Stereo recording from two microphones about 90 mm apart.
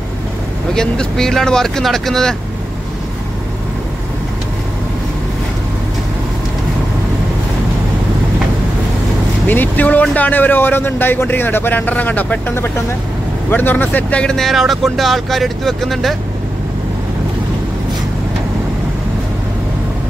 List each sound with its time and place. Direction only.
0.7 s speech: 5° left (ahead or behind)
9.5 s a man's voice: 20° left (ahead or behind); by 16.2 s centre (ahead or behind)